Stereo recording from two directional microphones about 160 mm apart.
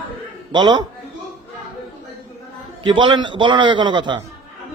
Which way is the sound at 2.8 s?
30° right (ahead or behind).